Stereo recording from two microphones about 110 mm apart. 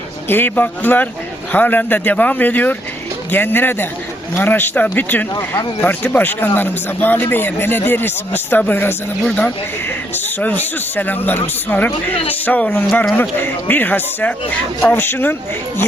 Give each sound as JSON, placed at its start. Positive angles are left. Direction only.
{"t": 0.3, "sound": "a man's voice", "side_deg": 20}